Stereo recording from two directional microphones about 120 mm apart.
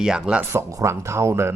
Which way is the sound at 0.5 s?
25° right (ahead or behind).